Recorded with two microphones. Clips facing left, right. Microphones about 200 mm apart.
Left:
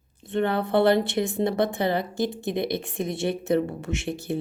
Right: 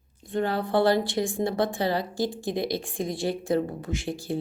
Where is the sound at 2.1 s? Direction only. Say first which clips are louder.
Left 1 dB; 20° left (ahead or behind).